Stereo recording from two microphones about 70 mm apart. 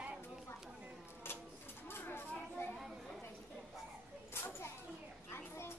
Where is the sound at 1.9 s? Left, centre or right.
Left.